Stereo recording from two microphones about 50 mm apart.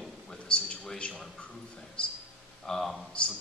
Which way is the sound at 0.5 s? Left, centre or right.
Left.